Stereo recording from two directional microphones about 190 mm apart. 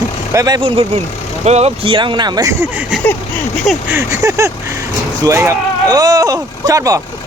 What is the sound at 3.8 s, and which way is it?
Speech, 15° right (ahead or behind).